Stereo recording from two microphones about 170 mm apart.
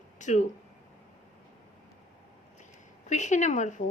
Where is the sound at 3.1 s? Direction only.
45° left (ahead or behind).